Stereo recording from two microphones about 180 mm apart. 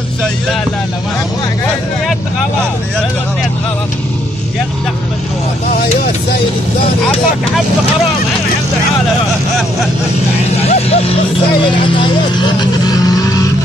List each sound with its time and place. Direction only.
10.6 s speech: 35° left (ahead or behind)